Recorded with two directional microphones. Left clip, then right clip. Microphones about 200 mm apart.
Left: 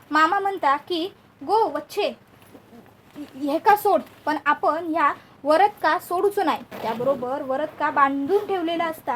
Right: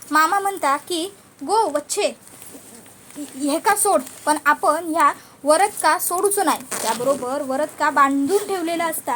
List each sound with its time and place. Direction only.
0.1 s a woman's voice: 30° right (ahead or behind)
3.4 s speech: 25° right (ahead or behind); by 7.2 s 45° right (ahead or behind)
7.3 s speech: 30° right (ahead or behind)